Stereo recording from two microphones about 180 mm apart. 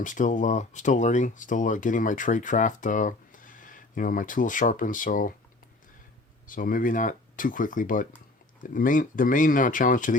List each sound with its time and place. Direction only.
0.0 s speech: 45° left (ahead or behind)
6.5 s speech: 50° left (ahead or behind)